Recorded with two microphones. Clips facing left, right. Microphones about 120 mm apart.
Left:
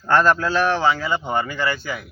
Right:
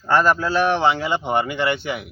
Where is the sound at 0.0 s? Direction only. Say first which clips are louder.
Even; 10° right (ahead or behind).